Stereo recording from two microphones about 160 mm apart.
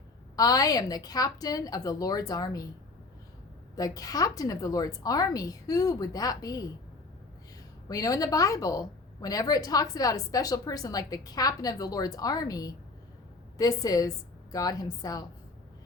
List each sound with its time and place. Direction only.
0.3 s a woman's voice: 25° left (ahead or behind)
3.8 s a woman's voice: 20° left (ahead or behind)
7.9 s a woman's voice: 20° left (ahead or behind)